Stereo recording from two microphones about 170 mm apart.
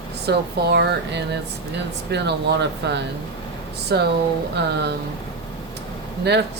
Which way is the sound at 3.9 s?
75° right (ahead or behind).